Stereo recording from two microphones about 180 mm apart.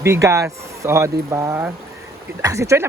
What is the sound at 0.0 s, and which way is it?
Speech, 15° right (ahead or behind).